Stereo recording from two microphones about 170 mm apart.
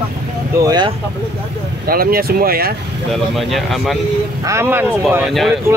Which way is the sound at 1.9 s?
60° right (ahead or behind).